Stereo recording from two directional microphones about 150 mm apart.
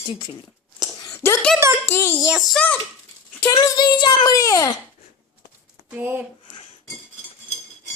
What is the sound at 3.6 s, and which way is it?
A child's voice, 25° left (ahead or behind).